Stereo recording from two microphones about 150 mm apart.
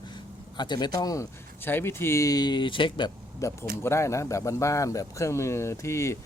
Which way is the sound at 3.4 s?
20° left (ahead or behind).